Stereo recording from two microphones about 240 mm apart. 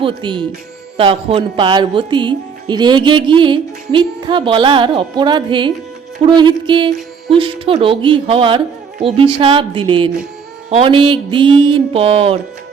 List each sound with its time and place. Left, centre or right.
0.0 s speech: centre